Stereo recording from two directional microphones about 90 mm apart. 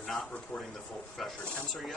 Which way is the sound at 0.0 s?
5° left (ahead or behind).